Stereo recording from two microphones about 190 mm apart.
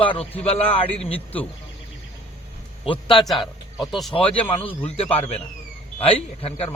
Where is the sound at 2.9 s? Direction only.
25° left (ahead or behind).